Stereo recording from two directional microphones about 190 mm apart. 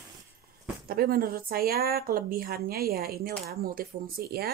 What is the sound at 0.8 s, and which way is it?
A woman's voice, 50° right (ahead or behind).